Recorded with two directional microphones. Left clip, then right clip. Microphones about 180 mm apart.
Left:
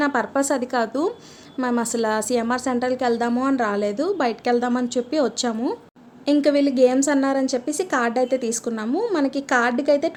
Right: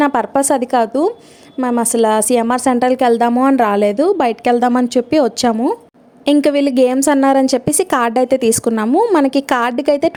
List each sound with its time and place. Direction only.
0.0 s a woman's voice: 40° right (ahead or behind)